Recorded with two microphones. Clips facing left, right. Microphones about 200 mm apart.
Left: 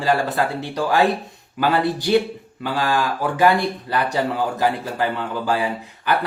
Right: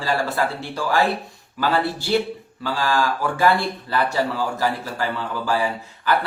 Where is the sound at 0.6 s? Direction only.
15° left (ahead or behind).